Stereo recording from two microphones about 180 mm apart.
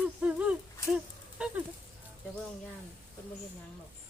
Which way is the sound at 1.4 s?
5° right (ahead or behind).